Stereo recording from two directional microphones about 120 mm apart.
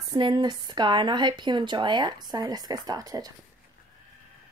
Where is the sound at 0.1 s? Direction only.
40° right (ahead or behind).